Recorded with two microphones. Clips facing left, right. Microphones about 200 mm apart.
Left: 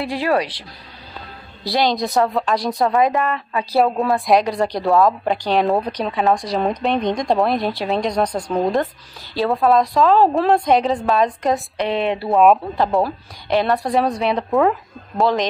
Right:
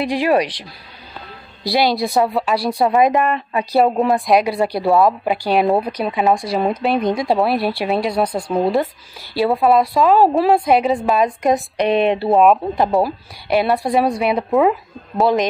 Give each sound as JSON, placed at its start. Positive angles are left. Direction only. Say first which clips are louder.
{"t": 0.0, "sound": "a woman's voice", "louder": "right 3 dB", "side_deg": -15}